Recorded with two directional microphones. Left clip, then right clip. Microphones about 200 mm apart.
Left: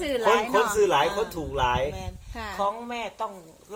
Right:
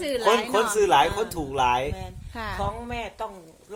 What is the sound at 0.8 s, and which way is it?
Speech, 55° right (ahead or behind).